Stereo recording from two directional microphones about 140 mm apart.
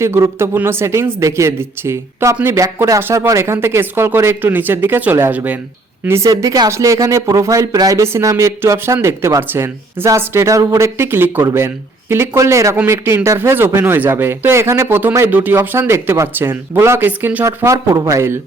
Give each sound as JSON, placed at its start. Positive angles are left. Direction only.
{"t": 0.0, "sound": "speech", "side_deg": -20}